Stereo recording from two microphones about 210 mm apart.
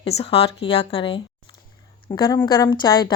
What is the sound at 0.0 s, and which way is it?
A woman's voice, 30° left (ahead or behind).